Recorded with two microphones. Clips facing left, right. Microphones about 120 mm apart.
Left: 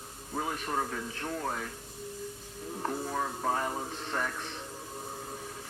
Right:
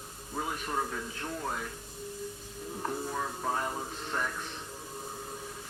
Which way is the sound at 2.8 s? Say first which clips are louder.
Left 2 dB; 45° left (ahead or behind).